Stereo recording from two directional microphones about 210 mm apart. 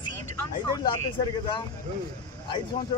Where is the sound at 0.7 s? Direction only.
20° left (ahead or behind).